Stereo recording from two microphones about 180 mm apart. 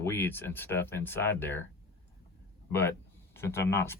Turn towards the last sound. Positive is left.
turn(degrees=15)  # may be behind; listen again after turning